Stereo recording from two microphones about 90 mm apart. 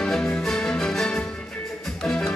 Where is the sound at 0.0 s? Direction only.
5° left (ahead or behind).